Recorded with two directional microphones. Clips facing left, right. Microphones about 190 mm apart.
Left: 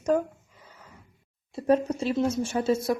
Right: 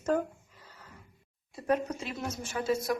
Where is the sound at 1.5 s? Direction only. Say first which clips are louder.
Left 6 dB; 25° left (ahead or behind).